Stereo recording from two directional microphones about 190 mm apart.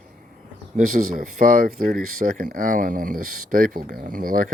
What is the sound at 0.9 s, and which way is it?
Speech, 50° right (ahead or behind).